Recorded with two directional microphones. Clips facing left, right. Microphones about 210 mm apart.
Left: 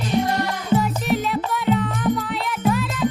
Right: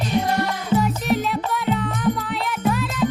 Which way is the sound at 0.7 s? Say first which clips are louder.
Even; centre (ahead or behind).